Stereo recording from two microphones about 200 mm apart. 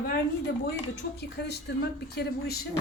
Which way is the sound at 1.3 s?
55° left (ahead or behind).